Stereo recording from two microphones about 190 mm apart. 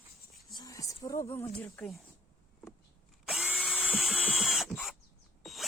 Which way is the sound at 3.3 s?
Centre (ahead or behind).